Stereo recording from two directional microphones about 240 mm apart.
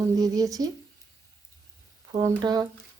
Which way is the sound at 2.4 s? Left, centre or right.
Centre.